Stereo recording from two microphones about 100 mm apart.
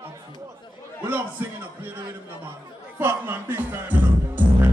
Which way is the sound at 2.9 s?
20° right (ahead or behind).